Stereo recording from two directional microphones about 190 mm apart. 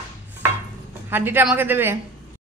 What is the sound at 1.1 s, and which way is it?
Speech, 10° right (ahead or behind).